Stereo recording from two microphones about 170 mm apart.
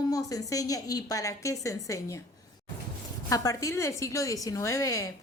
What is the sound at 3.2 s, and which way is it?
A woman's voice, 20° left (ahead or behind).